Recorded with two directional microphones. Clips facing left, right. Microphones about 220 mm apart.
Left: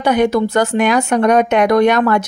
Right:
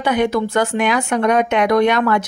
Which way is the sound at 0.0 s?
40° left (ahead or behind).